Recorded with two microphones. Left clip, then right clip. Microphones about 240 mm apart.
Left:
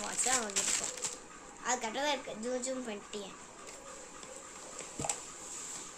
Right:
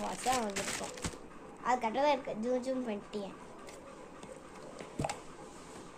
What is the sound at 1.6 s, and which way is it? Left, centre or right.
Speech, centre.